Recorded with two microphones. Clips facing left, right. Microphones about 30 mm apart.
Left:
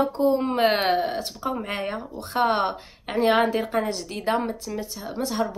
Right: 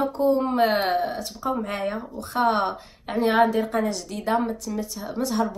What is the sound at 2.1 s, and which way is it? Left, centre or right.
Speech, left.